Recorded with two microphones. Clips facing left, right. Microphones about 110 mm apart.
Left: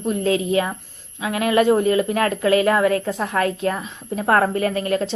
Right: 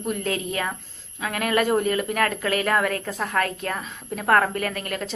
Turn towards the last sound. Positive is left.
turn(degrees=30)  # may be behind; listen again after turning